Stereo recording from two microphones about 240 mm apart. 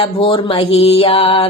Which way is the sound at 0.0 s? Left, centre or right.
Left.